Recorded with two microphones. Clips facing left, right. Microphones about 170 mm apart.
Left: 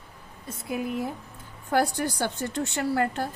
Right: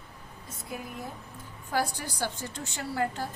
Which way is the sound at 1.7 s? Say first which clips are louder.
Left 6 dB; 60° left (ahead or behind).